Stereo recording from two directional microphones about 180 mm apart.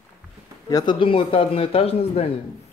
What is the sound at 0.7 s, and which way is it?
A man's voice, 25° left (ahead or behind).